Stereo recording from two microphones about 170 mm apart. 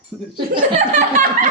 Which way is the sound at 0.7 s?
45° right (ahead or behind).